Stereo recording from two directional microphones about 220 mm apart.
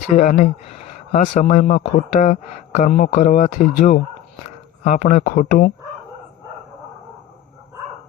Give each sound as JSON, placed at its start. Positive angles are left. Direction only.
{"t": 0.2, "sound": "speech", "side_deg": 30}